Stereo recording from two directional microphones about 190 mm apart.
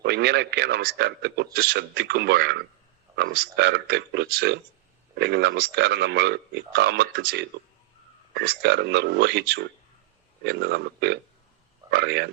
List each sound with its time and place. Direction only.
0.0 s a man's voice: 60° right (ahead or behind)